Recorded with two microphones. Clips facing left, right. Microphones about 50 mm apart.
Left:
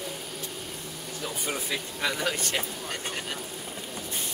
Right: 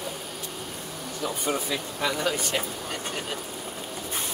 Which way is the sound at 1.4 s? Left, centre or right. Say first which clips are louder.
Right 3 dB; centre.